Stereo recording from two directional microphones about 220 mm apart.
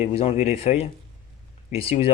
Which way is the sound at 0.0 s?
30° left (ahead or behind).